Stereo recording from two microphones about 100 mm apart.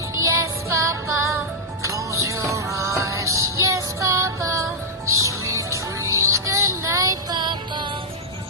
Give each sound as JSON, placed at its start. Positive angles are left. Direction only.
{"t": 0.2, "sound": "music", "side_deg": -30}